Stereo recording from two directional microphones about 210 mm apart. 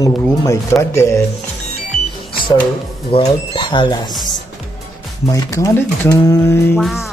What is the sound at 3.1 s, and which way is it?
Speech, 20° left (ahead or behind).